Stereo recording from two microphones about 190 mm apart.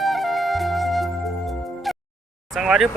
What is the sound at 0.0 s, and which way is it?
Music, centre (ahead or behind).